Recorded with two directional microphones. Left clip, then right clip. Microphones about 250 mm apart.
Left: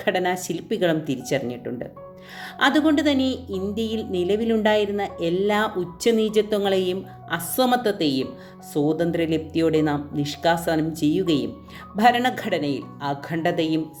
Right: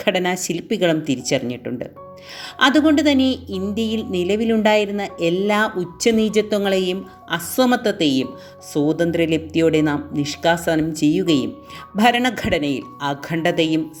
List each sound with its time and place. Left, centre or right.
0.0 s a woman's voice: right